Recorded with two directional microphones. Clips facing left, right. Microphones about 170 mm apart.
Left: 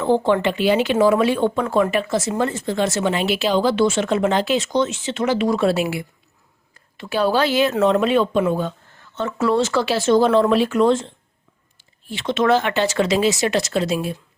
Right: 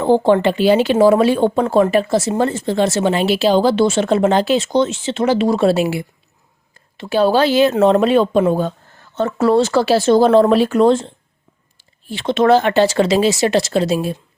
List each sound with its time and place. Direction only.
0.0 s speech: 35° right (ahead or behind)